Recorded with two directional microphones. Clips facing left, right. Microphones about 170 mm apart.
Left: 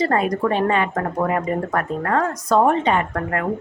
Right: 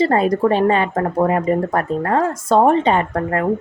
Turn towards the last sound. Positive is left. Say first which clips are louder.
# right 4 dB
turn(degrees=-30)  # may be behind; listen again after turning